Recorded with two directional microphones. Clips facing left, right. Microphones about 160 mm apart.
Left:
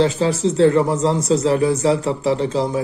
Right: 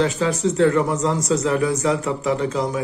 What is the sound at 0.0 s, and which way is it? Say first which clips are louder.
Speech: left 3 dB; 30° left (ahead or behind).